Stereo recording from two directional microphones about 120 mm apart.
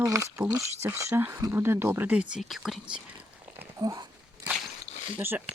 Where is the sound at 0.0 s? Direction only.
25° right (ahead or behind).